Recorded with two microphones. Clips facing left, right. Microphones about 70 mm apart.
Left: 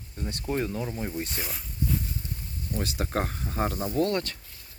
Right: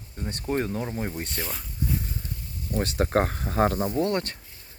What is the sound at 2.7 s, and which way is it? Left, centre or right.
Speech, right.